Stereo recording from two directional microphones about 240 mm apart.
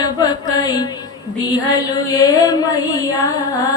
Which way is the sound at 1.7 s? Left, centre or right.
Centre.